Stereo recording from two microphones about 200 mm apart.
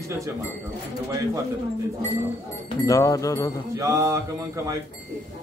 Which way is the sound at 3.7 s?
15° right (ahead or behind).